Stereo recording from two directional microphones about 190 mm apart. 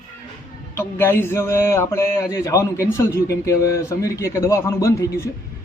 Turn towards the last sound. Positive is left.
turn(degrees=15)  # may be behind; listen again after turning